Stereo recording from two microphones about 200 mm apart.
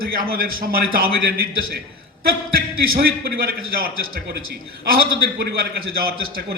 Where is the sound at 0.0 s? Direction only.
45° right (ahead or behind).